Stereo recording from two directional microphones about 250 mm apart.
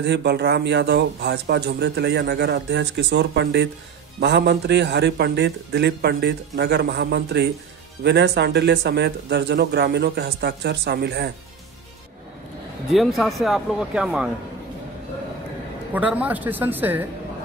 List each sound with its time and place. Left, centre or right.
0.0 s a man's voice: right
12.9 s speech: centre
15.9 s a woman's voice: centre